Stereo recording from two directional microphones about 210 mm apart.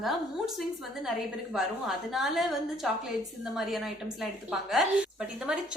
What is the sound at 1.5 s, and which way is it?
A woman's voice, centre (ahead or behind).